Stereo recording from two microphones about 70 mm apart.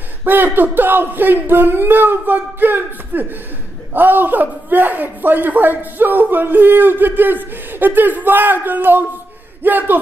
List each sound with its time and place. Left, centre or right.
0.2 s speech: right